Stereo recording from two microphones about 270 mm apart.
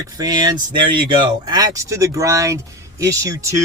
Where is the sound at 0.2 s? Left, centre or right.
Centre.